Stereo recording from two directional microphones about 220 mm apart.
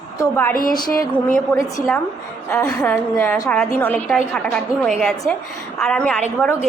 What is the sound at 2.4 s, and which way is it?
A woman's voice, 10° left (ahead or behind).